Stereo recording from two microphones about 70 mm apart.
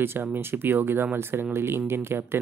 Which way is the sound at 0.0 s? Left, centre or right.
Right.